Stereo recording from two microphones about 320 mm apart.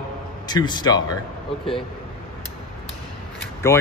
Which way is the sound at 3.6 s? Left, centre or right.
Centre.